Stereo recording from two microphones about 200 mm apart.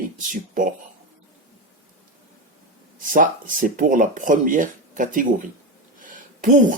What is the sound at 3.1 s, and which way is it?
Speech, 45° right (ahead or behind).